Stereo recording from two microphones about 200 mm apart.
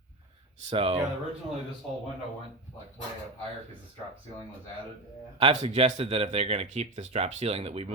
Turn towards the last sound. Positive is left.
turn(degrees=-30)  # may be behind; listen again after turning